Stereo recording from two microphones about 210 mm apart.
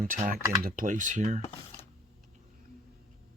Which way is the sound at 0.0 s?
40° right (ahead or behind).